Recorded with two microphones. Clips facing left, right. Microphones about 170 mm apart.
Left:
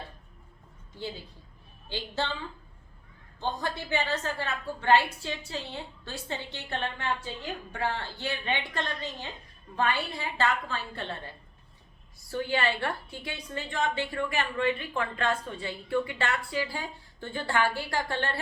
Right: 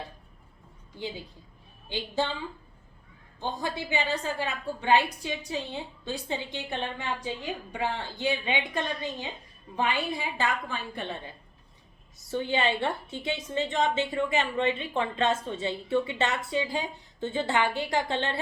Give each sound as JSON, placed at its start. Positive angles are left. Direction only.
{"t": 1.9, "sound": "a woman's voice", "side_deg": -15}
{"t": 3.6, "sound": "a woman's voice", "side_deg": -15}
{"t": 12.3, "sound": "a woman's voice", "side_deg": -20}